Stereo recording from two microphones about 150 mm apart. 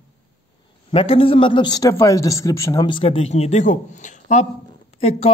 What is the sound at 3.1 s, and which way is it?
A man's voice, 45° left (ahead or behind).